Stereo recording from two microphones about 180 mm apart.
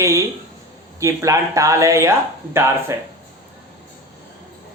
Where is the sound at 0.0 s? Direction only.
15° right (ahead or behind).